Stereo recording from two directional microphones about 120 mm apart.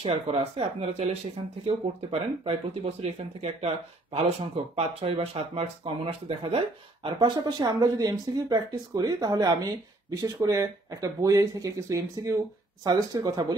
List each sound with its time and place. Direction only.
0.0 s speech: 55° right (ahead or behind); by 13.6 s 35° right (ahead or behind)